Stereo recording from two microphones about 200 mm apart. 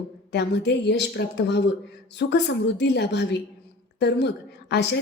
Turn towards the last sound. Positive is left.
turn(degrees=60)  # may be behind; listen again after turning